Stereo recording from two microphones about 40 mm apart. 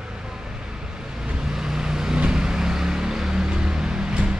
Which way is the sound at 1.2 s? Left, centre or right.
Centre.